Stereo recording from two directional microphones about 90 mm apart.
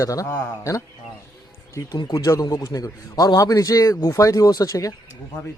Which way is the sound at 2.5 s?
40° left (ahead or behind).